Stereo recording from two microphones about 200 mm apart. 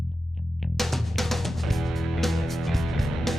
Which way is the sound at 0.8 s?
Centre (ahead or behind).